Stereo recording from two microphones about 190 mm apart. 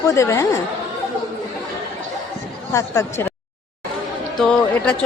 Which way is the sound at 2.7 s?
15° left (ahead or behind).